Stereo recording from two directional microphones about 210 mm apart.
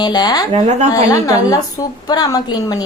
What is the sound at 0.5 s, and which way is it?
Speech, 35° right (ahead or behind).